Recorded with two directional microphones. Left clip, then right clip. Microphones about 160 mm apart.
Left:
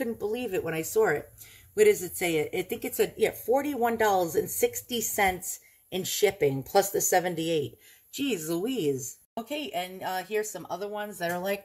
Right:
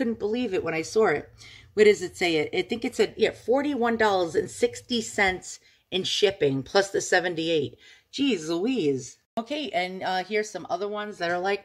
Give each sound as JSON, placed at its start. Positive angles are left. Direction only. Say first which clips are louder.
{"t": 0.0, "sound": "speech", "louder": "right 3 dB", "side_deg": -25}
{"t": 9.3, "sound": "speech", "louder": "right 5 dB", "side_deg": -30}